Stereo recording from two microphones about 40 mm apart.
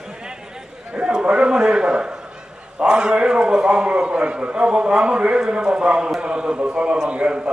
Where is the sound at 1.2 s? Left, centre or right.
Right.